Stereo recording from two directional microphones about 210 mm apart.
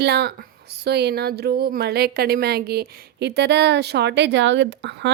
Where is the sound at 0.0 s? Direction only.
50° right (ahead or behind).